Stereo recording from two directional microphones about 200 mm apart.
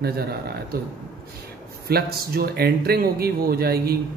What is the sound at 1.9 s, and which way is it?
A man's voice, 50° right (ahead or behind).